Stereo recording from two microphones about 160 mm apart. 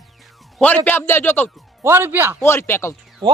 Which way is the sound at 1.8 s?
15° right (ahead or behind).